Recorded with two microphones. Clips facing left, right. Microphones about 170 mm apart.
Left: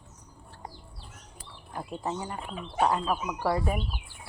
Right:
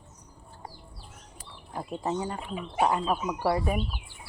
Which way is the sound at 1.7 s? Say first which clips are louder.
Right 3 dB; 15° right (ahead or behind).